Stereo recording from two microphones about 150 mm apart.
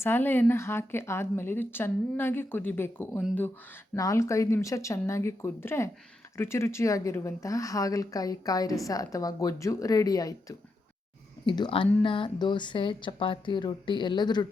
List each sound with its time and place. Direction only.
0.0 s speech: 15° left (ahead or behind)
11.4 s speech: 30° left (ahead or behind)